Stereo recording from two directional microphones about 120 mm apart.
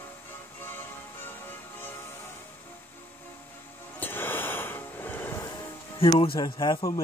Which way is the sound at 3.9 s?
15° left (ahead or behind).